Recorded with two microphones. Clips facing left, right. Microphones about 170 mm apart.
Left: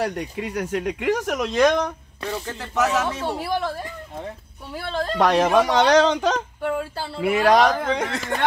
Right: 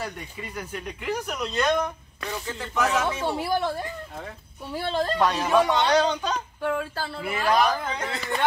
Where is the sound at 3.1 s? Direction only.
5° right (ahead or behind).